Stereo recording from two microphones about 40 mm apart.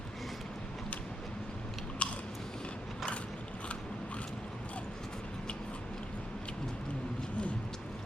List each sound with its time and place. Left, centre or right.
2.0 s biting: left